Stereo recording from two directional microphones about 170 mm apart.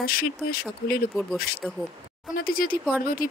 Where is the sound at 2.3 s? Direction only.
60° left (ahead or behind).